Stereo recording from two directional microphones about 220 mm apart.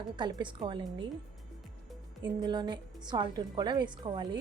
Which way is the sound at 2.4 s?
20° right (ahead or behind).